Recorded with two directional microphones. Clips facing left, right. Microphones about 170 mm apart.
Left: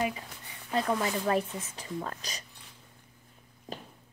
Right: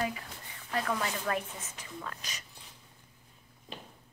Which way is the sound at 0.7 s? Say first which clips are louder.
Left 4 dB; 25° left (ahead or behind).